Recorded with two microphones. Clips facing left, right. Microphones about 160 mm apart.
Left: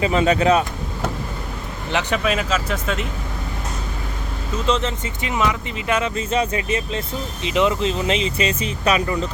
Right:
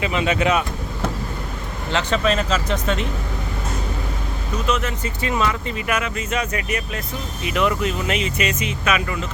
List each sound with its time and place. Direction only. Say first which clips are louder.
0.0 s speech: left 3 dB; 35° left (ahead or behind)
1.9 s speech: right 1 dB; 15° left (ahead or behind)
4.6 s speech: left 2 dB; 25° left (ahead or behind)